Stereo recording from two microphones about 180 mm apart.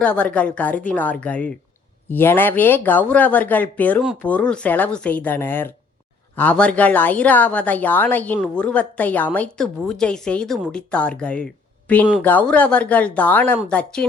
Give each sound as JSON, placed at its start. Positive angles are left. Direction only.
{"t": 0.0, "sound": "a woman's voice", "side_deg": 5}